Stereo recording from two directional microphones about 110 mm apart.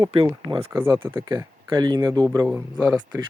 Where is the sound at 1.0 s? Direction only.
30° right (ahead or behind).